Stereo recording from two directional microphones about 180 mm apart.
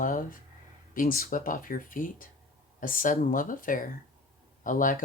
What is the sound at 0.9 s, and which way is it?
Speech, 50° left (ahead or behind).